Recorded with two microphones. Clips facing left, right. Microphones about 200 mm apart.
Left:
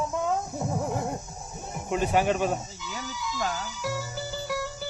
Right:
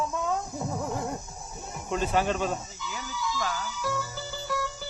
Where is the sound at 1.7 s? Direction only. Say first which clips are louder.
Left 2 dB; 15° left (ahead or behind).